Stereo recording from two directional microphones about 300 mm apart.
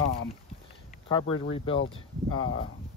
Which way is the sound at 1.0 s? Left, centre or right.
Centre.